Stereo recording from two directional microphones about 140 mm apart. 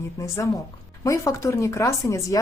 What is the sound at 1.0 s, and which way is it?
A woman's voice, 20° left (ahead or behind).